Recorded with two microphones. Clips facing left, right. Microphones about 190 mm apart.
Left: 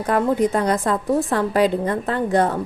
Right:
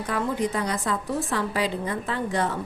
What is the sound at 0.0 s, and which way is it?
A woman's voice, 45° left (ahead or behind).